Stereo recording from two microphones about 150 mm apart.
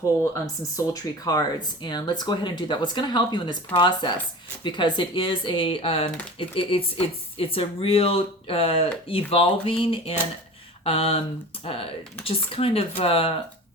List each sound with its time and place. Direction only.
0.0 s speech: 20° left (ahead or behind); by 13.3 s 35° left (ahead or behind)